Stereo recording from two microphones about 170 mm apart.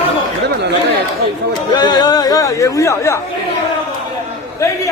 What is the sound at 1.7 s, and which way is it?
Chatter, 25° left (ahead or behind).